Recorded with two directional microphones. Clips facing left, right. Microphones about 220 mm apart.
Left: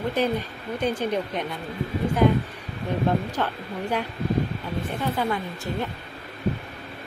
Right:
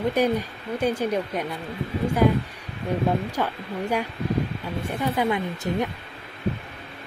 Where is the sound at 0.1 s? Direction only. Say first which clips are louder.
Right 2 dB; 10° right (ahead or behind).